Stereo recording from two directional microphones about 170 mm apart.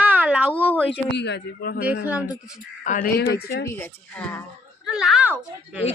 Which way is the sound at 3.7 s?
10° left (ahead or behind).